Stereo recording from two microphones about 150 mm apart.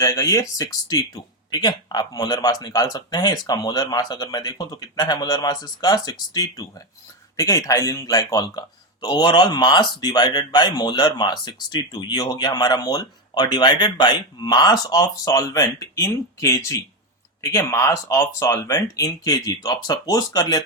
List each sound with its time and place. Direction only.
0.0 s speech: 20° left (ahead or behind)